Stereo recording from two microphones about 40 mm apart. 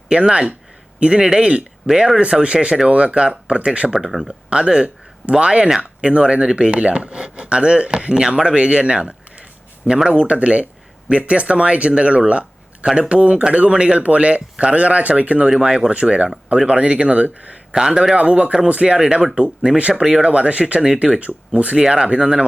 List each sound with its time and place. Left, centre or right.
0.1 s speech: right
3.9 s speech: centre
4.3 s speech: right
15.4 s speech: centre
17.7 s speech: centre
18.1 s speech: right
19.9 s speech: centre
20.3 s speech: right